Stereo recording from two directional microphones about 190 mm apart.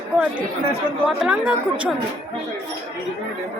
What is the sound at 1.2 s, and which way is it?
Speech, 5° right (ahead or behind).